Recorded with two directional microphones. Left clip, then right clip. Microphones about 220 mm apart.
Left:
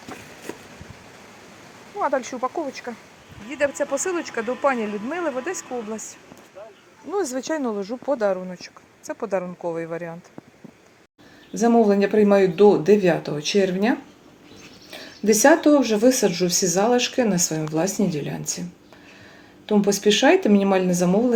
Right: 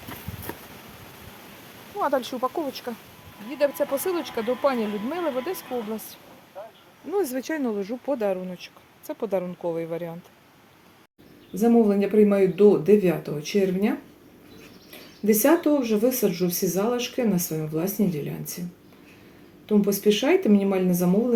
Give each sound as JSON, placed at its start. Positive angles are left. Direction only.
{"t": 2.0, "sound": "speech", "side_deg": 0}
{"t": 7.1, "sound": "speech", "side_deg": 0}
{"t": 8.3, "sound": "speech", "side_deg": -20}
{"t": 9.0, "sound": "speech", "side_deg": -5}
{"t": 11.5, "sound": "speech", "side_deg": 5}
{"t": 15.3, "sound": "speech", "side_deg": 10}
{"t": 19.6, "sound": "speech", "side_deg": 10}